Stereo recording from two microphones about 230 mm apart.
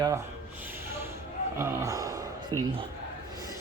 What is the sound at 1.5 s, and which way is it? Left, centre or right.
Speech, centre.